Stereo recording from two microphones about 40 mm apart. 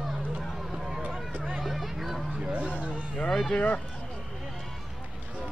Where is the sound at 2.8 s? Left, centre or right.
Right.